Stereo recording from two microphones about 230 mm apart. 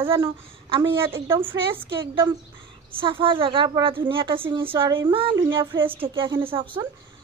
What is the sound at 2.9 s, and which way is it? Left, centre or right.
A woman's voice, right.